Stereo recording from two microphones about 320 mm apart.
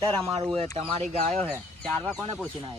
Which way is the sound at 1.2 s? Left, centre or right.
Centre.